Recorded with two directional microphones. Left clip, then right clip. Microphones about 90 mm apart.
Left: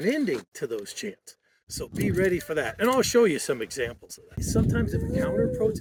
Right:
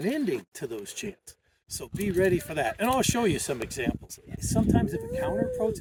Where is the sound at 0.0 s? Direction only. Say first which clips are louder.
Left 3 dB; 30° right (ahead or behind).